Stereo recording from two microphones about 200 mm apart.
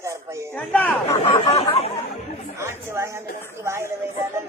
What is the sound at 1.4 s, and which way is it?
Speech, 30° left (ahead or behind).